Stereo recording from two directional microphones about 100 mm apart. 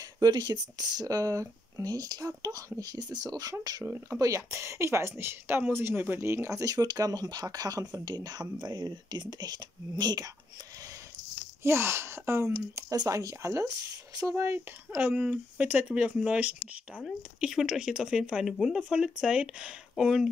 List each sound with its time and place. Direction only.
0.2 s speech: 40° right (ahead or behind)
11.6 s speech: 25° right (ahead or behind)
15.0 s speech: 15° right (ahead or behind)